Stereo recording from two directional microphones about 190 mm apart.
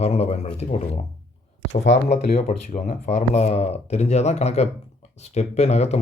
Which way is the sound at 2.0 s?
35° left (ahead or behind).